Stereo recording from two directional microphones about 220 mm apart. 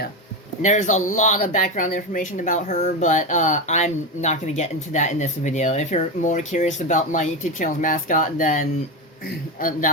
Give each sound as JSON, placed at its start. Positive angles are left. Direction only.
{"t": 0.6, "sound": "speech", "side_deg": 35}